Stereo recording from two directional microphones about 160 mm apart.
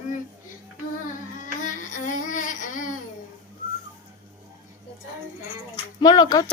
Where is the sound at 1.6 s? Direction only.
55° left (ahead or behind).